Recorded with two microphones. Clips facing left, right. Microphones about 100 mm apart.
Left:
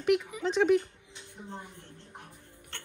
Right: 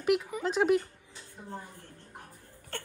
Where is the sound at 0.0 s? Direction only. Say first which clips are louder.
Left 1 dB; 5° right (ahead or behind).